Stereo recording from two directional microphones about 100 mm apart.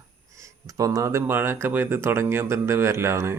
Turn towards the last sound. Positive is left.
turn(degrees=-25)  # may be behind; listen again after turning